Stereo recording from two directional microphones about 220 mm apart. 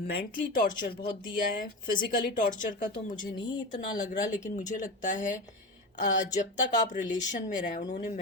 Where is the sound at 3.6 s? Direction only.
35° left (ahead or behind).